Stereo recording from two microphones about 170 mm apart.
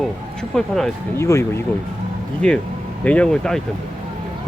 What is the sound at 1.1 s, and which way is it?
Speech, 15° left (ahead or behind).